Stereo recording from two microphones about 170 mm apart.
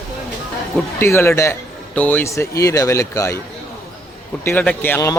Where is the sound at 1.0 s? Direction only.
15° left (ahead or behind).